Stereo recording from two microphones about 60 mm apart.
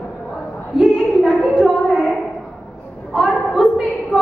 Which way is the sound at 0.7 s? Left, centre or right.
Centre.